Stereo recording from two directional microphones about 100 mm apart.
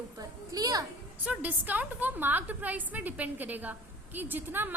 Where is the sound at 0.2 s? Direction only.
40° right (ahead or behind).